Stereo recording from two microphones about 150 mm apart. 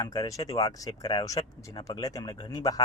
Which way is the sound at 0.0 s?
25° left (ahead or behind).